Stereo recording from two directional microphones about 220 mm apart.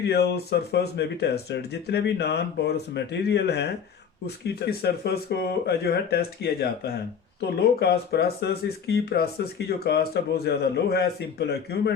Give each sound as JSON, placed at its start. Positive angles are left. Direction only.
{"t": 0.0, "sound": "speech", "side_deg": 50}